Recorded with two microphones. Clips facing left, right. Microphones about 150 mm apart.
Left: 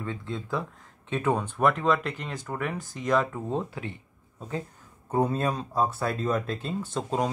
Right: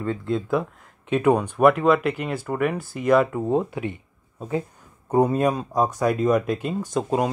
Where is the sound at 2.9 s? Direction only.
65° right (ahead or behind).